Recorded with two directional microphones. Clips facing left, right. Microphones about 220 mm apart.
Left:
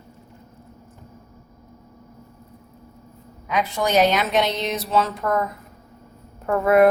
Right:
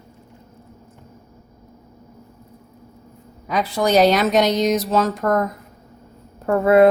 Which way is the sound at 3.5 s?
35° right (ahead or behind).